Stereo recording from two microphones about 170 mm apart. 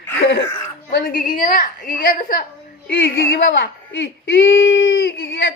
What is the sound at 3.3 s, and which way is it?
A woman's voice, 75° left (ahead or behind).